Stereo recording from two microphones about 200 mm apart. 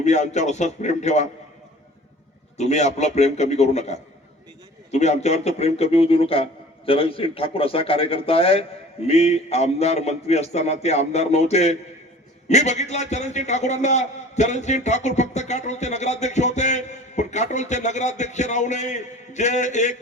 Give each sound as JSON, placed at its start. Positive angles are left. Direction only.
{"t": 0.0, "sound": "a man's voice", "side_deg": 35}
{"t": 2.6, "sound": "a man's voice", "side_deg": 35}